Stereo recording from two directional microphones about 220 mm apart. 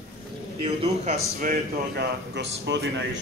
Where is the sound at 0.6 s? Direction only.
30° right (ahead or behind); by 2.9 s 50° right (ahead or behind).